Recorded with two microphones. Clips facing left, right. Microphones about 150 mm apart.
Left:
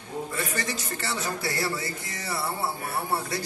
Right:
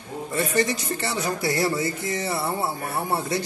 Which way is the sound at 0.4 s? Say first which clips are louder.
Right 12 dB; 20° right (ahead or behind).